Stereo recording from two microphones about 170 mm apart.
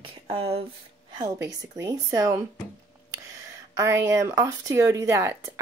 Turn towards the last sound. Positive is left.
turn(degrees=-15)  # may be behind; listen again after turning